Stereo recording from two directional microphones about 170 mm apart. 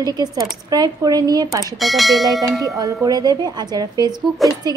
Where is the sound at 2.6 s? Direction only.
20° right (ahead or behind).